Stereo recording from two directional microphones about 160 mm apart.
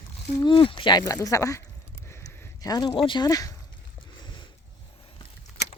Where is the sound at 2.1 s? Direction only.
15° left (ahead or behind).